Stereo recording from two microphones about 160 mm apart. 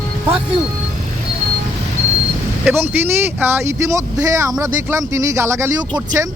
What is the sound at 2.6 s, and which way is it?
Speech, 10° right (ahead or behind).